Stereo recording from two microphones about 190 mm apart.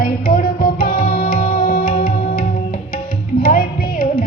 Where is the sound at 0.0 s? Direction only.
45° left (ahead or behind).